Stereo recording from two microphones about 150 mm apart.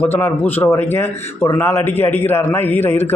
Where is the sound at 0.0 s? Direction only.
15° left (ahead or behind).